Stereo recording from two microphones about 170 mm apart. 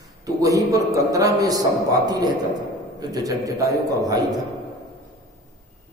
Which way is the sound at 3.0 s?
20° right (ahead or behind).